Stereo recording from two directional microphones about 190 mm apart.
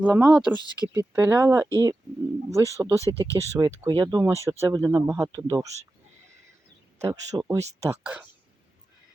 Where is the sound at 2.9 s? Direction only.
15° left (ahead or behind).